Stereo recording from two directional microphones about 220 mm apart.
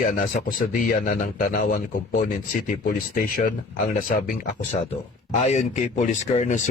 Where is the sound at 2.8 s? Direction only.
40° left (ahead or behind).